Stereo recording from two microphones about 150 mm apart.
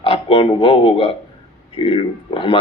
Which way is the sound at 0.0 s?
40° left (ahead or behind).